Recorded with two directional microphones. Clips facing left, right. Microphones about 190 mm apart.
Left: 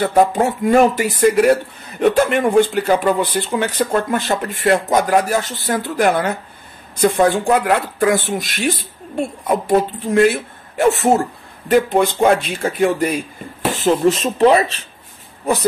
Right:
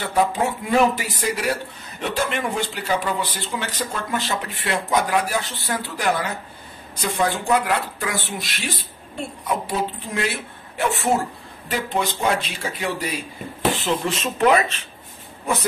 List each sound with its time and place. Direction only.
0.0 s speech: 45° left (ahead or behind)